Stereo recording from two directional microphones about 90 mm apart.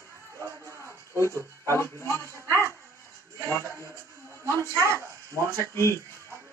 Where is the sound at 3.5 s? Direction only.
25° left (ahead or behind).